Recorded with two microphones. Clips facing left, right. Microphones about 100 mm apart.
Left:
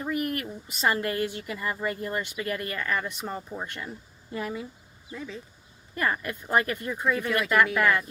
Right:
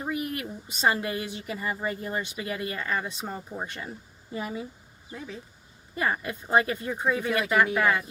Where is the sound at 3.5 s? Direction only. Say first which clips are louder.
Even; 20° right (ahead or behind).